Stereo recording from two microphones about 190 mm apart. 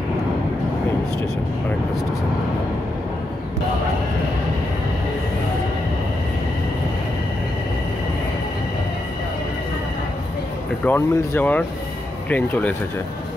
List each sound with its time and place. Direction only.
10.9 s speech: 10° left (ahead or behind)